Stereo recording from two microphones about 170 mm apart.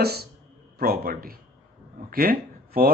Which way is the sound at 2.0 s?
60° right (ahead or behind).